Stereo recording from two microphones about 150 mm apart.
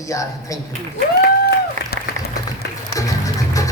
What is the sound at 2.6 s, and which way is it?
Music, 90° left.